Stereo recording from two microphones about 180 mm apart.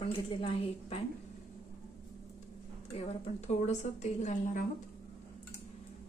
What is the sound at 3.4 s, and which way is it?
A woman's voice, 40° left (ahead or behind).